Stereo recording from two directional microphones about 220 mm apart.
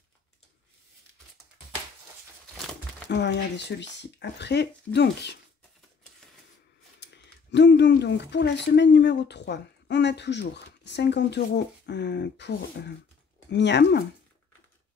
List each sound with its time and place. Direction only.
3.1 s speech: 50° left (ahead or behind)
7.0 s speech: 50° left (ahead or behind)